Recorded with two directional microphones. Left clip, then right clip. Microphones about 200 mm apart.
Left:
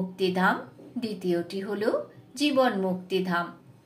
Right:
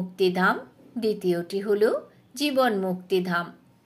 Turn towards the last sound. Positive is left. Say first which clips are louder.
# right 2 dB
turn(degrees=-45)  # may be behind; listen again after turning